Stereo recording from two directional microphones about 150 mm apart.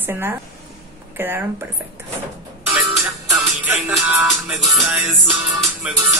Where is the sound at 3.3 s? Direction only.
20° right (ahead or behind).